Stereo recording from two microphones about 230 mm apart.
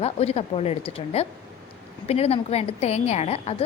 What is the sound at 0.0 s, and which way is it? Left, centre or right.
A woman's voice, left.